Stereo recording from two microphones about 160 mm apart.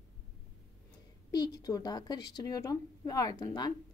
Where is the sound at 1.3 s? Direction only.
25° left (ahead or behind).